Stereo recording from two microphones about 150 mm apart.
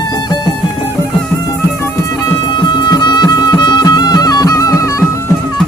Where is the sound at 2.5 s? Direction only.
30° left (ahead or behind).